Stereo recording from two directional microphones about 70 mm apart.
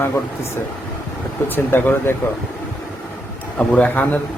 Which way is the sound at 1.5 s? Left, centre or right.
Left.